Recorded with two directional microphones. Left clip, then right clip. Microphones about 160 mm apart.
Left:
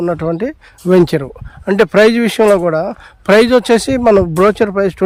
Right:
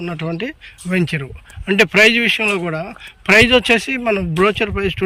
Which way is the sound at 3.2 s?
30° left (ahead or behind).